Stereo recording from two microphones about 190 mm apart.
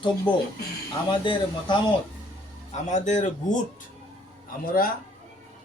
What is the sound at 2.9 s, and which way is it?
Speech, 40° left (ahead or behind).